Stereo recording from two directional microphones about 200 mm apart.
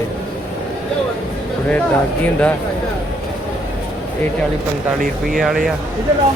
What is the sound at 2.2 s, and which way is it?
Speech, 5° left (ahead or behind).